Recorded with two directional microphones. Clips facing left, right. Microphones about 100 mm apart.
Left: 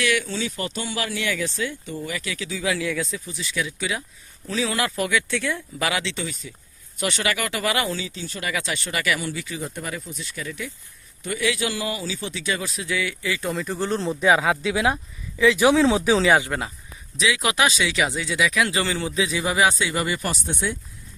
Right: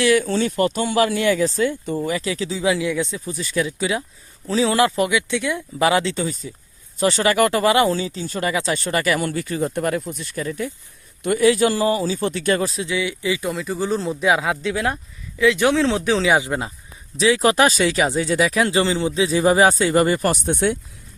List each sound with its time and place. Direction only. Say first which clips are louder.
0.0 s speech: right 7 dB; 35° right (ahead or behind)
2.1 s speech: right 6 dB; 30° right (ahead or behind)
3.2 s speech: right 6 dB; 40° right (ahead or behind)
3.7 s speech: right 6 dB; 25° right (ahead or behind)
5.8 s speech: right 8 dB; 35° right (ahead or behind)
7.3 s speech: right 11 dB; 50° right (ahead or behind)
7.6 s speech: right 8 dB; 30° right (ahead or behind)
7.9 s speech: right 7 dB; 40° right (ahead or behind)
9.2 s speech: right 7 dB; 50° right (ahead or behind)
12.6 s speech: right 4 dB; 30° right (ahead or behind)
13.4 s speech: right 2 dB; centre (ahead or behind)
16.3 s speech: right 1 dB; 20° right (ahead or behind)
17.2 s speech: right 6 dB; 35° right (ahead or behind); by 20.7 s 60° right (ahead or behind)